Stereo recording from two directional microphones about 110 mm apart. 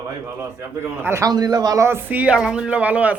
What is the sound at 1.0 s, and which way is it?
Speech, 25° right (ahead or behind).